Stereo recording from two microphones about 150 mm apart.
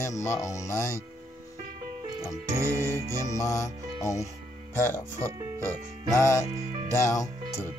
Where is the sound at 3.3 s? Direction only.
20° left (ahead or behind).